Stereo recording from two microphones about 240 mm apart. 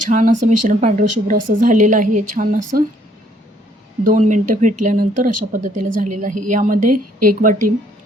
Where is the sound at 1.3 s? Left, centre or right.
Right.